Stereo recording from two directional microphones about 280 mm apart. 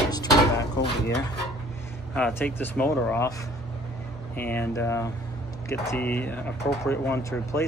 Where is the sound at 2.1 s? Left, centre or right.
Centre.